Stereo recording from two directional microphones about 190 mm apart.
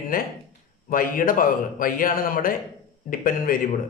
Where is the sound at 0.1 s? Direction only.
50° left (ahead or behind).